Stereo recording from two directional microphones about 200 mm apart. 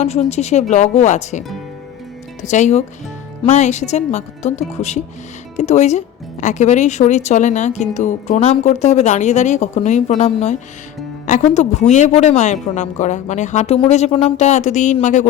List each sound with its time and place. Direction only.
0.0 s a woman's voice: 35° left (ahead or behind)